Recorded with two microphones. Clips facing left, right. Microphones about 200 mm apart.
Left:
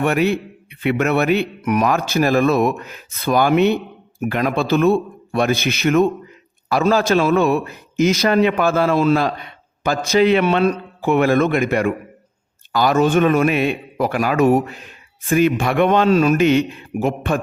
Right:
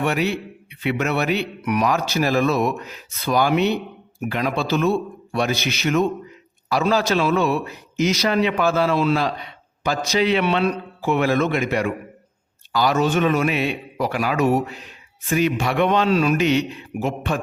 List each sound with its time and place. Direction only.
0.0 s a man's voice: 50° left (ahead or behind)